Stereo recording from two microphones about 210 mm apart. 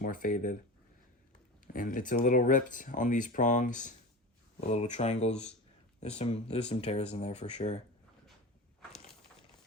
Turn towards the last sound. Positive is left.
turn(degrees=30)  # may be behind; listen again after turning